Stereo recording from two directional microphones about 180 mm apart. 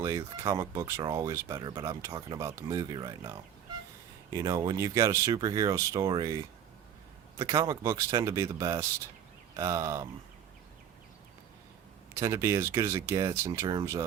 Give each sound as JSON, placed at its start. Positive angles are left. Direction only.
{"t": 0.0, "sound": "speech", "side_deg": -15}
{"t": 7.3, "sound": "speech", "side_deg": -15}
{"t": 12.1, "sound": "speech", "side_deg": -15}